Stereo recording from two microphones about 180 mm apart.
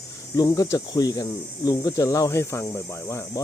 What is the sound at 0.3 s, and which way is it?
Speech, 20° left (ahead or behind).